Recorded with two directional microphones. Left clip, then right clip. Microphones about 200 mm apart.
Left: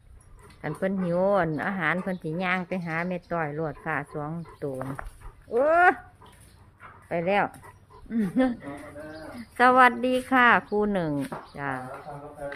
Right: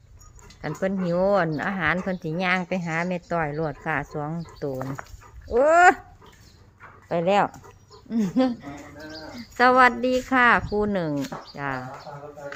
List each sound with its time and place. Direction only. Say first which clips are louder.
0.6 s a woman's voice: right 2 dB; 5° right (ahead or behind)
7.1 s a woman's voice: right 4 dB; 15° right (ahead or behind)